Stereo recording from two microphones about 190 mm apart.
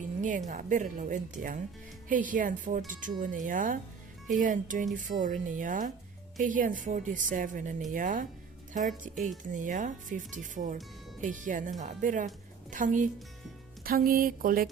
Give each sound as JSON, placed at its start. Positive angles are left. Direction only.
{"t": 0.2, "sound": "speech", "side_deg": -40}
{"t": 9.4, "sound": "speech", "side_deg": -40}